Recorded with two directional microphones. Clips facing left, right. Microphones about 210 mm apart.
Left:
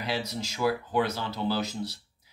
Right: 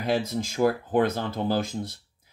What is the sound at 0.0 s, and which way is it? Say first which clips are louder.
Speech: right 6 dB; 50° right (ahead or behind).